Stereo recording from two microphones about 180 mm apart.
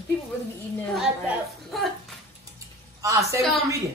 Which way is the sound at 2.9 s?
20° right (ahead or behind).